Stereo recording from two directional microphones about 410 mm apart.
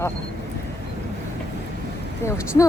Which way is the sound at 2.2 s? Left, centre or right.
Centre.